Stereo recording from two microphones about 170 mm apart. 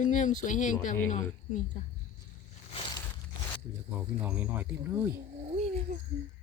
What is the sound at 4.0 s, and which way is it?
Speech, 10° right (ahead or behind).